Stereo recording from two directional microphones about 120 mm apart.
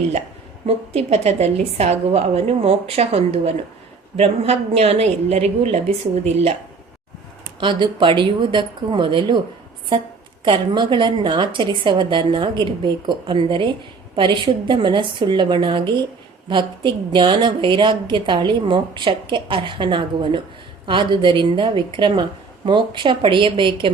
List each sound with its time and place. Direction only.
0.9 s a woman's voice: 60° right (ahead or behind)
7.6 s a woman's voice: 40° right (ahead or behind)
10.4 s a woman's voice: 45° right (ahead or behind)